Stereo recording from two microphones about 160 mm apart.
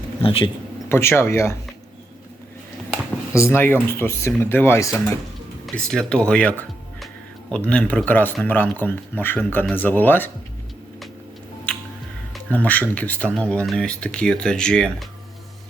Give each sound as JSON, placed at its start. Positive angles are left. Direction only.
{"t": 0.2, "sound": "speech", "side_deg": 35}
{"t": 0.9, "sound": "speech", "side_deg": 15}
{"t": 3.3, "sound": "speech", "side_deg": 15}
{"t": 5.6, "sound": "speech", "side_deg": 5}
{"t": 12.3, "sound": "speech", "side_deg": 10}